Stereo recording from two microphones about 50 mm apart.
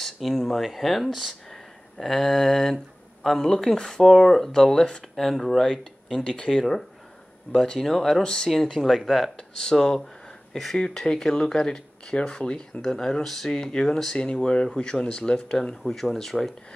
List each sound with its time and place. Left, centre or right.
0.0 s speech: centre
4.0 s speech: centre
8.2 s speech: centre
8.7 s speech: centre
14.1 s speech: centre
15.8 s speech: centre